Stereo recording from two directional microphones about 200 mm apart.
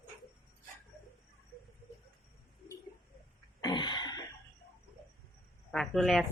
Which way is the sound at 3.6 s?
25° left (ahead or behind).